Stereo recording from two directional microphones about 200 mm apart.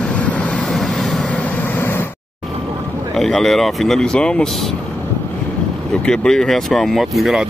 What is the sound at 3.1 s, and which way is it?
Speech, centre (ahead or behind).